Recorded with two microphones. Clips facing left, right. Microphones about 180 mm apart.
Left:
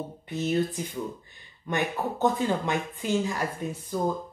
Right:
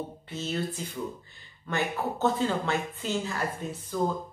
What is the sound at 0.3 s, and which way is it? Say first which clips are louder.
A woman's voice: left 7 dB; 15° left (ahead or behind).